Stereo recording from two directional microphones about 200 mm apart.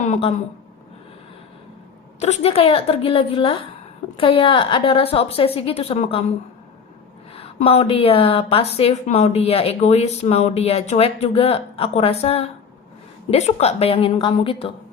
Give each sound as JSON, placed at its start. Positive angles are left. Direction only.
{"t": 0.0, "sound": "a woman's voice", "side_deg": 35}
{"t": 2.2, "sound": "a woman's voice", "side_deg": 30}
{"t": 7.3, "sound": "a woman's voice", "side_deg": 30}